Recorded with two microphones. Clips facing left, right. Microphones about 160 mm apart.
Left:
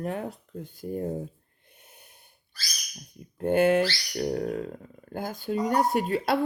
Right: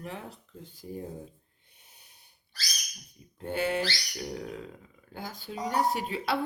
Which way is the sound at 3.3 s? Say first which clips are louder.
Left 9 dB; 50° left (ahead or behind).